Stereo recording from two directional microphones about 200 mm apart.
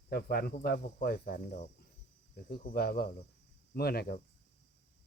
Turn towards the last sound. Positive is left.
turn(degrees=50)  # may be behind; listen again after turning